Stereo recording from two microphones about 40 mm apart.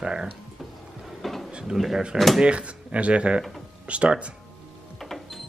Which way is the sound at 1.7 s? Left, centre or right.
Centre.